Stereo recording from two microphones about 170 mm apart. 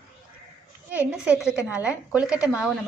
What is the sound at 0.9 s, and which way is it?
Speech, 5° right (ahead or behind).